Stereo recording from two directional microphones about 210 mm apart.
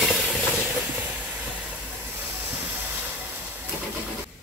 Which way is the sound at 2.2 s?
10° right (ahead or behind).